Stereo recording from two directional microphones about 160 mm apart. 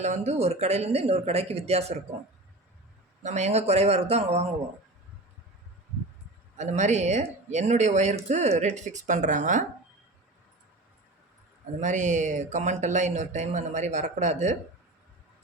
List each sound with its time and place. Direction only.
0.0 s speech: 45° right (ahead or behind)
3.2 s speech: 45° right (ahead or behind)
6.6 s speech: 45° right (ahead or behind)
11.8 s speech: 50° right (ahead or behind)